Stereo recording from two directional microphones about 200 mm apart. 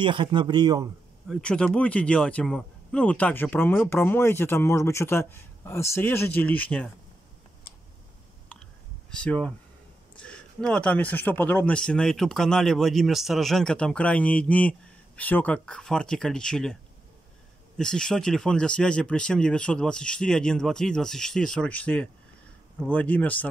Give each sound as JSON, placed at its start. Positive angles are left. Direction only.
{"t": 0.0, "sound": "speech", "side_deg": -25}
{"t": 1.3, "sound": "speech", "side_deg": 5}
{"t": 9.1, "sound": "speech", "side_deg": 5}
{"t": 17.7, "sound": "speech", "side_deg": 5}